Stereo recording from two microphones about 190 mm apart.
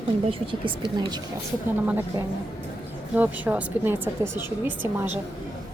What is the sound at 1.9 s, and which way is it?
A woman's voice, 10° right (ahead or behind).